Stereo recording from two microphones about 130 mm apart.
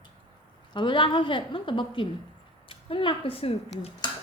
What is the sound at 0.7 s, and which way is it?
A woman's voice, 35° left (ahead or behind).